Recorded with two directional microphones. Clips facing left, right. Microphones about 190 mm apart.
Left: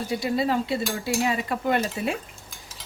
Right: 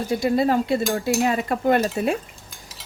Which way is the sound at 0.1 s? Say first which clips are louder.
Right 5 dB; 50° right (ahead or behind).